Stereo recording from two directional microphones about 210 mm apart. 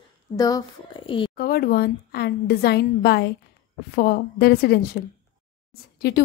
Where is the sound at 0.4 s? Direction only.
20° left (ahead or behind).